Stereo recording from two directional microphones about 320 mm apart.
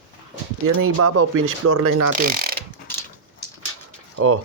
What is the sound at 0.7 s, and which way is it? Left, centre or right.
Speech, right.